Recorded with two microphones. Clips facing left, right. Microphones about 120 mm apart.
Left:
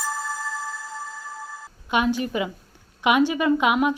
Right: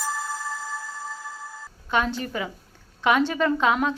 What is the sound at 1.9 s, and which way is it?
A woman's voice, 15° left (ahead or behind).